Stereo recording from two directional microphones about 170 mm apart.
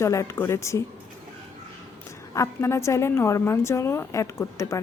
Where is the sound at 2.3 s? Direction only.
15° left (ahead or behind).